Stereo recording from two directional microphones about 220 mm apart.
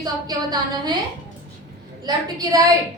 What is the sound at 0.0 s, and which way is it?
Speech, 20° right (ahead or behind).